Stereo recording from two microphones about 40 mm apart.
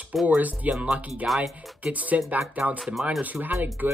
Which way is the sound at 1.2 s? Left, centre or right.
Centre.